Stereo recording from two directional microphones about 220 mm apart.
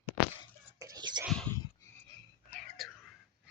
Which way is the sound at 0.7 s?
15° right (ahead or behind).